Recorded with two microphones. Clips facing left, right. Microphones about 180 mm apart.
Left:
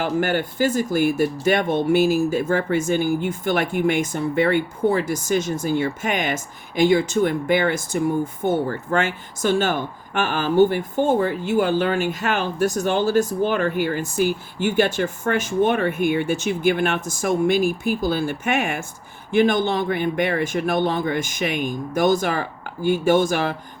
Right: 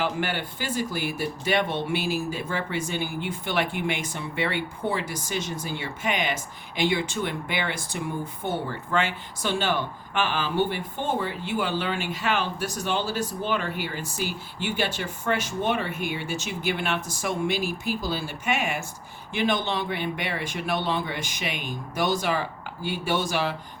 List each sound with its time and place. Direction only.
0.0 s speech: 45° left (ahead or behind)